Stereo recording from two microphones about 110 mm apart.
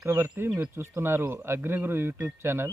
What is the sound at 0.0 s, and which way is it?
Speech, 25° right (ahead or behind).